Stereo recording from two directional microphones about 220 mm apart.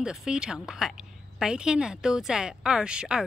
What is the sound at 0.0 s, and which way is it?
A woman's voice, 5° right (ahead or behind).